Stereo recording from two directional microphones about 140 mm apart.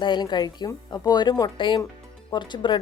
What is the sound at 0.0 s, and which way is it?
A woman's voice, 30° left (ahead or behind).